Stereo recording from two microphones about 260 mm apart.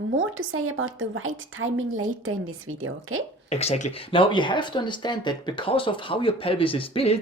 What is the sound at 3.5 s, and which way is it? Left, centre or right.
Speech, left.